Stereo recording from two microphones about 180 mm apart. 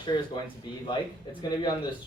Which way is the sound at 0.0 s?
25° left (ahead or behind).